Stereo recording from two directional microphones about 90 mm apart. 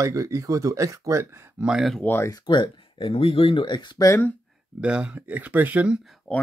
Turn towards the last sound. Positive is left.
turn(degrees=20)  # may be behind; listen again after turning